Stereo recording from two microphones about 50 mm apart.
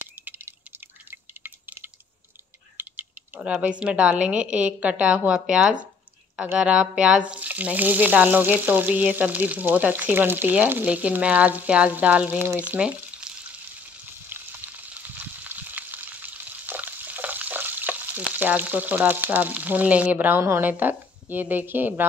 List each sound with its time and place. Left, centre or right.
1.4 s drip: right
2.8 s typing: right
3.4 s a woman's voice: right
6.7 s speech: centre; by 10.5 s right
10.9 s a woman's voice: right
13.2 s frying: centre
14.0 s frying: right
18.3 s speech: right